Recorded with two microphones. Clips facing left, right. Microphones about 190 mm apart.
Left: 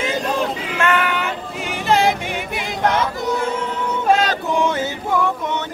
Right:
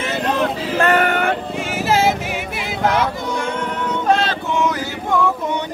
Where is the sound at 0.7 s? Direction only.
40° right (ahead or behind).